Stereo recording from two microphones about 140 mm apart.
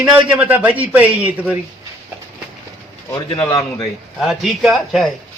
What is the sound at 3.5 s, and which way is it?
Speech, 25° left (ahead or behind).